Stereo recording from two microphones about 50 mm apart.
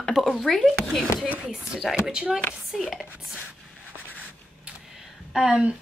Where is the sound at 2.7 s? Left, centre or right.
Centre.